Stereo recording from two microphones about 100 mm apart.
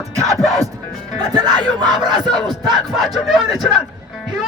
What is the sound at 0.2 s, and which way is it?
Music, centre (ahead or behind).